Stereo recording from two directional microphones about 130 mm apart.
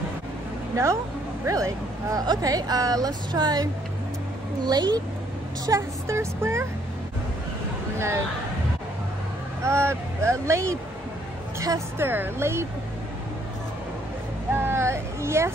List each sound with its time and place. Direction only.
1.4 s speech: 25° right (ahead or behind)
4.6 s speech: 30° right (ahead or behind)
5.7 s speech: 20° right (ahead or behind)
9.6 s speech: 20° right (ahead or behind)
14.5 s a sound: 20° right (ahead or behind)